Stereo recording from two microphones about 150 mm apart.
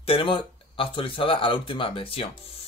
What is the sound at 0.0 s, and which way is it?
Speech, 35° left (ahead or behind).